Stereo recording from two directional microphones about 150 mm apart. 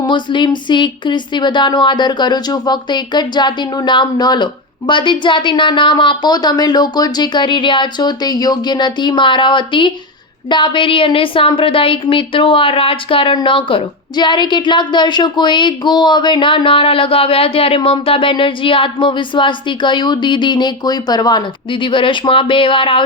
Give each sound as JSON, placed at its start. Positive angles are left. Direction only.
{"t": 0.0, "sound": "speech", "side_deg": 30}